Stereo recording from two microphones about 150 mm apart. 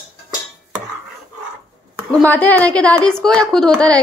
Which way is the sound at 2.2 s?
10° left (ahead or behind).